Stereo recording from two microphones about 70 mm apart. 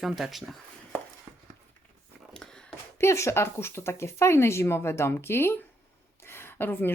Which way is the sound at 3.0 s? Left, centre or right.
Left.